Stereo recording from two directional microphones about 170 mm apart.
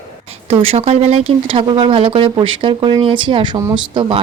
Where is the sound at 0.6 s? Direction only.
35° right (ahead or behind).